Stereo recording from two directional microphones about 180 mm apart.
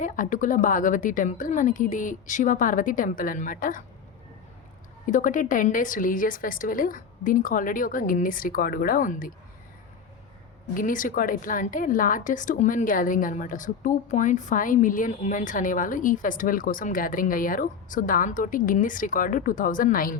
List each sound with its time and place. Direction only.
0.0 s a woman's voice: 45° left (ahead or behind)
5.0 s a woman's voice: 45° left (ahead or behind)
10.8 s a woman's voice: 50° left (ahead or behind)